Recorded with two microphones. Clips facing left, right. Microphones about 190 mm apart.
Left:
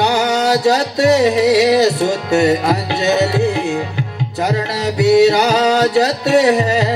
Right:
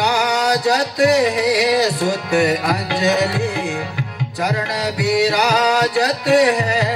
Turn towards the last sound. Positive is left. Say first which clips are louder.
# left 4 dB
turn(degrees=25)  # may be behind; listen again after turning